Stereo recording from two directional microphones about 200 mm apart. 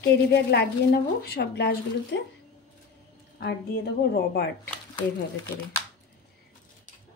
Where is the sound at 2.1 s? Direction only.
65° left (ahead or behind).